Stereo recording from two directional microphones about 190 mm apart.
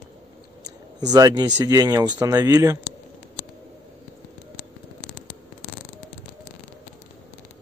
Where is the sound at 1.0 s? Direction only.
20° right (ahead or behind).